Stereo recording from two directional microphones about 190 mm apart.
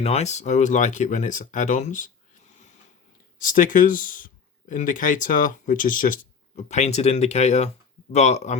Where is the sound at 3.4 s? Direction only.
45° left (ahead or behind).